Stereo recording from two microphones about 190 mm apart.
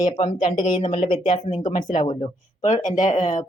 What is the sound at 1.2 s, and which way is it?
Speech, 40° left (ahead or behind).